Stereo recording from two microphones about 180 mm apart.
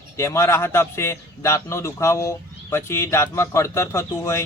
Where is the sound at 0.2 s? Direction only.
15° left (ahead or behind).